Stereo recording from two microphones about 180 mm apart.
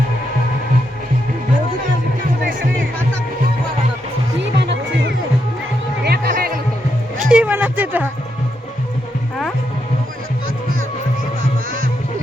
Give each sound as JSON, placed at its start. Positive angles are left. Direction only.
{"t": 4.5, "sound": "music", "side_deg": -75}
{"t": 6.1, "sound": "music", "side_deg": -60}
{"t": 7.2, "sound": "music", "side_deg": -5}